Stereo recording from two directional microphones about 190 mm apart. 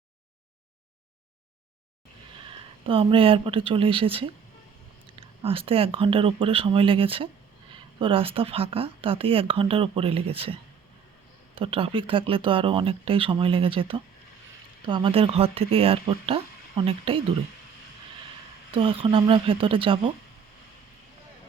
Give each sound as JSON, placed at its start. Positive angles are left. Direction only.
{"t": 2.8, "sound": "speech", "side_deg": -30}
{"t": 18.7, "sound": "speech", "side_deg": -25}